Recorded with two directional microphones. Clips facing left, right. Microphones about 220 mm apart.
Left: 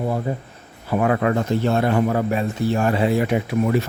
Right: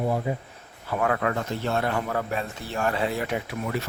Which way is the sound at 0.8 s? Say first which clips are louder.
Left 6 dB; 15° left (ahead or behind).